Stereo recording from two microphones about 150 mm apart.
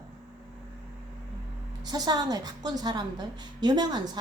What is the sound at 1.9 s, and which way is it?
A woman's voice, 25° right (ahead or behind).